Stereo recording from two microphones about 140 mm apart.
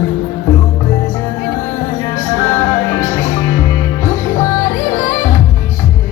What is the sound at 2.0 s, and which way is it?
Music, 20° left (ahead or behind).